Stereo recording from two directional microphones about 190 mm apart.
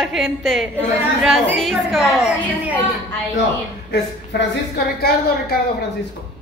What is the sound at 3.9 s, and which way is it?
A woman's voice, 60° left (ahead or behind).